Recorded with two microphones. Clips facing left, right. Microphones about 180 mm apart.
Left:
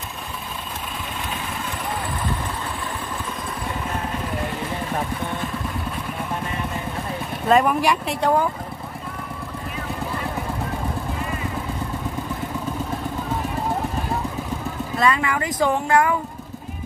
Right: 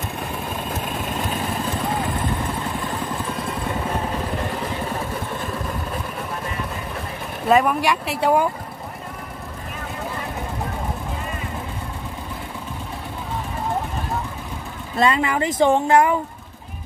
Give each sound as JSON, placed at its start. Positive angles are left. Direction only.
{"t": 7.4, "sound": "speech", "side_deg": 0}
{"t": 15.0, "sound": "speech", "side_deg": -25}